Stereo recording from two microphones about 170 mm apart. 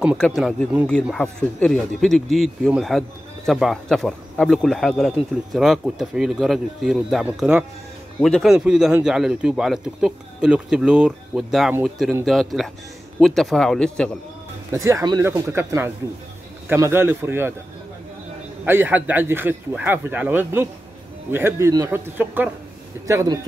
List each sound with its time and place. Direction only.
0.4 s speech: centre (ahead or behind)
14.7 s speech: 20° right (ahead or behind)
18.7 s speech: 10° right (ahead or behind)